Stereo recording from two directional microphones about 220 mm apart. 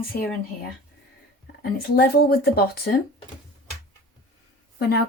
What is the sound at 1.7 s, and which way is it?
Speech, 45° left (ahead or behind).